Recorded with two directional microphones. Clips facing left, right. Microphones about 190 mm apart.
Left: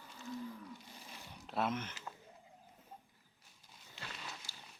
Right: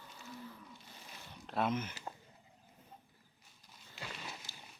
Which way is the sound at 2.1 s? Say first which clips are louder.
Right 3 dB; 35° right (ahead or behind).